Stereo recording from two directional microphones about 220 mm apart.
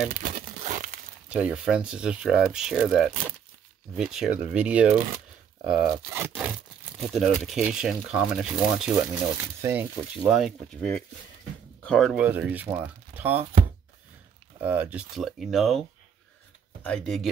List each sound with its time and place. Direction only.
0.1 s crumpling: 40° right (ahead or behind)
1.3 s speech: 5° right (ahead or behind)
14.6 s speech: 5° right (ahead or behind)
16.8 s speech: 5° left (ahead or behind)